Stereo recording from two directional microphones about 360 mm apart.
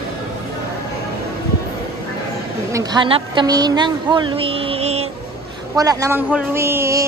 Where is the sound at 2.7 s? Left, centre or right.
Centre.